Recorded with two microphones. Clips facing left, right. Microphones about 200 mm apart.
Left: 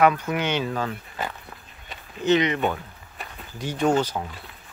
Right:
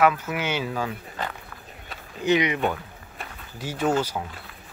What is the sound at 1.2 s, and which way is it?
Walk, 10° left (ahead or behind).